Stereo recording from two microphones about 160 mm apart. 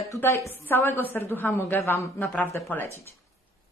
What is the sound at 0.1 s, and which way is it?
A woman's voice, 15° left (ahead or behind).